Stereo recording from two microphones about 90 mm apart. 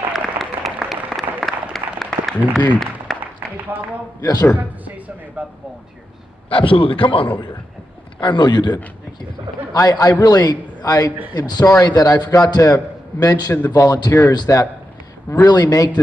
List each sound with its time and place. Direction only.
0.1 s applause: centre (ahead or behind)
3.1 s a sound: 5° left (ahead or behind)
3.7 s a man's voice: 20° right (ahead or behind)
4.2 s a man's voice: 45° left (ahead or behind)
4.6 s speech: 20° right (ahead or behind)
6.5 s a man's voice: 70° left (ahead or behind)
8.2 s a man's voice: 60° left (ahead or behind)
14.5 s speech: 35° left (ahead or behind)
15.4 s a man's voice: 45° left (ahead or behind)